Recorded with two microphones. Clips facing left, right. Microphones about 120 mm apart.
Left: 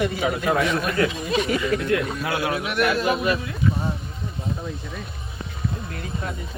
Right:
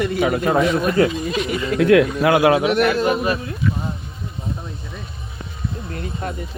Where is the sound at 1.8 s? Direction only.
80° right.